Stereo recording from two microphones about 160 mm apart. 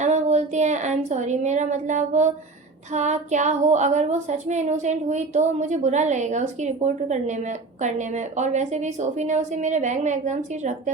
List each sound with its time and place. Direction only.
0.0 s speech: 45° right (ahead or behind)